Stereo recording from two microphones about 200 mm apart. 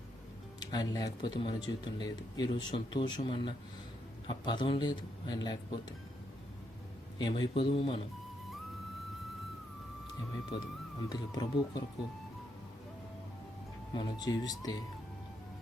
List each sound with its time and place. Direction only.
0.6 s speech: 20° left (ahead or behind)
7.2 s speech: 20° left (ahead or behind)
10.5 s speech: 25° left (ahead or behind)
13.9 s speech: 20° left (ahead or behind)